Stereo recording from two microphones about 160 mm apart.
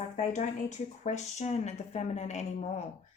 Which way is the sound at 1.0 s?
45° left (ahead or behind).